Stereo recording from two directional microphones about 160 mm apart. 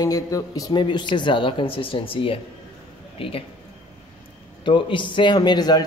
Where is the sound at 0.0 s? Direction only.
20° left (ahead or behind).